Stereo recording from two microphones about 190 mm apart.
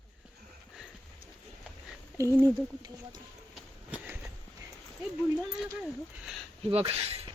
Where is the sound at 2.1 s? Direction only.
15° right (ahead or behind).